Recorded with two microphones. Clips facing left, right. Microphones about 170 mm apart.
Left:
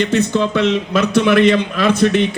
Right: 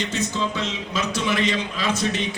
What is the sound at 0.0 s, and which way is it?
A man's voice, 60° left (ahead or behind).